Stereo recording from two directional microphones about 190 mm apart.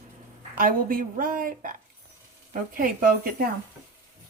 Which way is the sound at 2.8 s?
50° right (ahead or behind).